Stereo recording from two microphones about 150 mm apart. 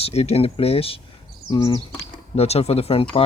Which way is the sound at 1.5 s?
25° left (ahead or behind).